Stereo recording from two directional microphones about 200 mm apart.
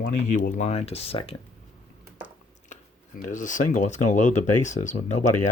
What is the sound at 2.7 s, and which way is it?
Speech, 40° left (ahead or behind).